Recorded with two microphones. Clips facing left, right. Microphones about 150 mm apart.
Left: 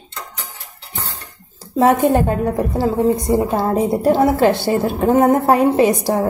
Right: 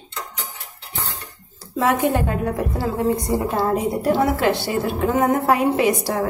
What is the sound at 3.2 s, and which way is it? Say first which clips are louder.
A woman's voice: left 4 dB; 20° left (ahead or behind).